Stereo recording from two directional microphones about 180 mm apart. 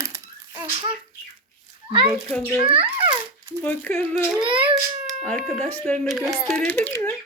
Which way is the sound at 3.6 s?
10° left (ahead or behind).